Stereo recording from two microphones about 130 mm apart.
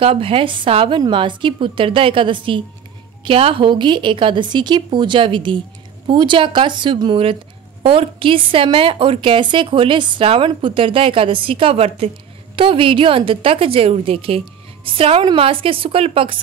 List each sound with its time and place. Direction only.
0.0 s a woman's voice: 45° right (ahead or behind)